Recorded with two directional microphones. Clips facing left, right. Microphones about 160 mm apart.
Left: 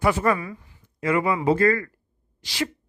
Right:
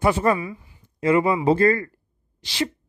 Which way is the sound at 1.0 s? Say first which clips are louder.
Right 3 dB; 25° right (ahead or behind).